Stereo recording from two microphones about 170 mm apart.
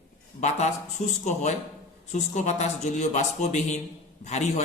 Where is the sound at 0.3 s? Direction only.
40° left (ahead or behind).